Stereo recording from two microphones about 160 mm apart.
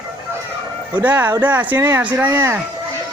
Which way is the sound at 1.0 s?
10° right (ahead or behind).